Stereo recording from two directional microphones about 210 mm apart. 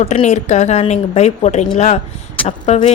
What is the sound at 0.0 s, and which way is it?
A woman's voice, 35° left (ahead or behind).